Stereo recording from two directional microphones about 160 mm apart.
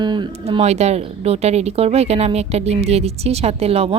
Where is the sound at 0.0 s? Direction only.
30° right (ahead or behind).